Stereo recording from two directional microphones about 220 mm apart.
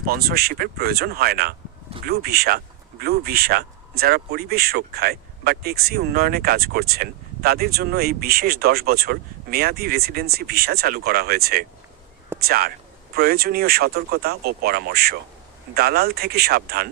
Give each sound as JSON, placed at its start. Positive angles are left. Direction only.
{"t": 0.0, "sound": "speech", "side_deg": -45}